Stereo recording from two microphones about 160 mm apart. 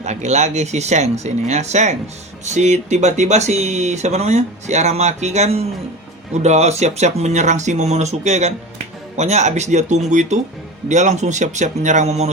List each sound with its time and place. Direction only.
0.0 s speech: 45° right (ahead or behind)